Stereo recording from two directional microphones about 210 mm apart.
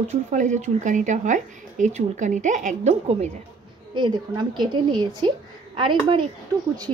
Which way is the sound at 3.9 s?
20° right (ahead or behind).